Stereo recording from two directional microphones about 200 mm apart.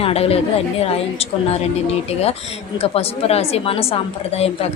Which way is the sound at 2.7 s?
30° left (ahead or behind).